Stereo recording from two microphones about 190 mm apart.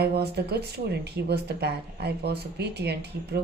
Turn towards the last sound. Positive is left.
turn(degrees=-60)  # may be behind; listen again after turning